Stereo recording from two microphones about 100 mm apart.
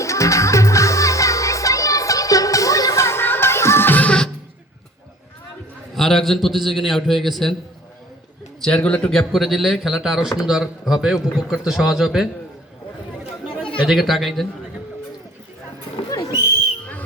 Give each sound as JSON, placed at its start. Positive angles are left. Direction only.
{"t": 0.0, "sound": "music", "side_deg": 30}
{"t": 5.9, "sound": "a man's voice", "side_deg": 5}
{"t": 8.6, "sound": "a man's voice", "side_deg": 10}
{"t": 13.8, "sound": "a man's voice", "side_deg": 0}